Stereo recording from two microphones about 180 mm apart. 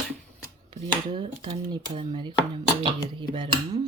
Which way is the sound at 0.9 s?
25° right (ahead or behind).